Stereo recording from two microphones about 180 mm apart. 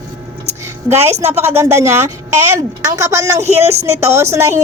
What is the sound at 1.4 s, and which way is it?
A woman's voice, 15° right (ahead or behind).